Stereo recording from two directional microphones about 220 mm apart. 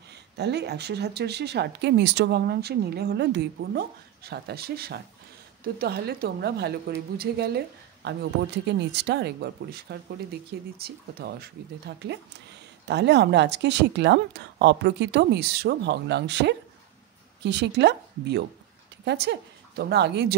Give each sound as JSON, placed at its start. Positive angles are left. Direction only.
{"t": 0.4, "sound": "speech", "side_deg": -50}